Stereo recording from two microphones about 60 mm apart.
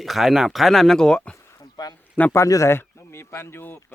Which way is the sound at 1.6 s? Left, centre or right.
Left.